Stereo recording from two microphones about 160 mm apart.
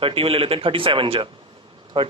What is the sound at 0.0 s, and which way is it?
A man's voice, 35° right (ahead or behind).